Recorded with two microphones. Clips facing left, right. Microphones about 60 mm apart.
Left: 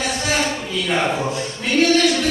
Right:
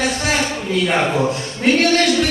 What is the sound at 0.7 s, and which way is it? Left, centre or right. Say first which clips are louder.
Speech: right 4 dB; right.